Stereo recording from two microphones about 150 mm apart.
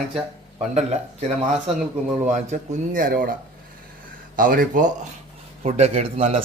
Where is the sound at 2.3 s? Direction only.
60° right (ahead or behind).